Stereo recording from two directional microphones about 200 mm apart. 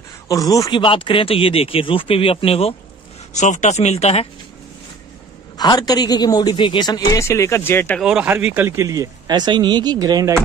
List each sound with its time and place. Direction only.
0.3 s speech: 15° left (ahead or behind); by 4.3 s 35° left (ahead or behind)
5.6 s speech: 20° left (ahead or behind)
8.0 s speech: 5° right (ahead or behind)